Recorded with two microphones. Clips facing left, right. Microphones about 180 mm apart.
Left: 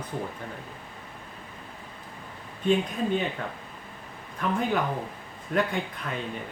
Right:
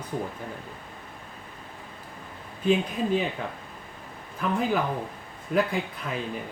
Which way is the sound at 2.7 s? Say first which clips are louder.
Right 1 dB; 5° right (ahead or behind).